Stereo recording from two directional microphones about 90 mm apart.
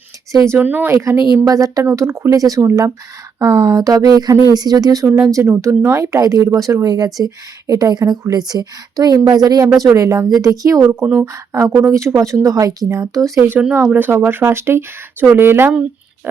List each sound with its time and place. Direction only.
0.4 s speech: 25° right (ahead or behind)
0.9 s a woman's voice: 35° right (ahead or behind)
5.3 s a woman's voice: 30° right (ahead or behind)
9.9 s a woman's voice: 35° right (ahead or behind)
10.8 s speech: 20° right (ahead or behind)
11.3 s a woman's voice: 35° right (ahead or behind)
13.6 s speech: 10° right (ahead or behind)